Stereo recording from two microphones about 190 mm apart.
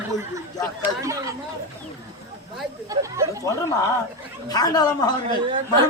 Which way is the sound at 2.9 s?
15° right (ahead or behind).